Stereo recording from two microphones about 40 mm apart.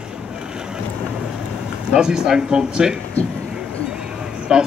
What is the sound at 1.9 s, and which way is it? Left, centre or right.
Speech, centre.